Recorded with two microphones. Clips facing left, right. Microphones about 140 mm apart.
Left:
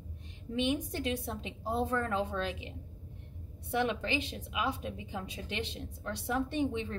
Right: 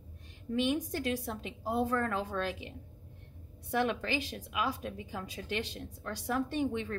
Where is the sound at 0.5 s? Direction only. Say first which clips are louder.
Right 1 dB; 25° left (ahead or behind).